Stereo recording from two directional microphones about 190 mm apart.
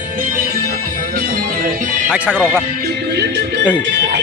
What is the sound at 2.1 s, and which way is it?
Speech, 5° right (ahead or behind).